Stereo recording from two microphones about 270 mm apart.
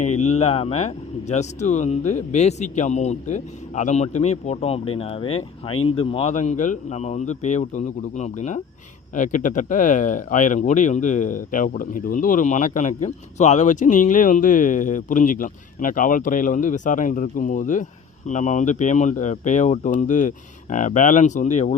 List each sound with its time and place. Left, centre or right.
0.2 s speech: left